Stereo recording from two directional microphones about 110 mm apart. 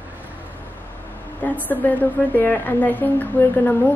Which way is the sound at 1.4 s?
15° left (ahead or behind).